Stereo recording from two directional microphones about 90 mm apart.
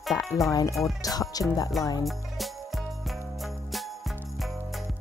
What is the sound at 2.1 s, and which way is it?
Music, centre (ahead or behind).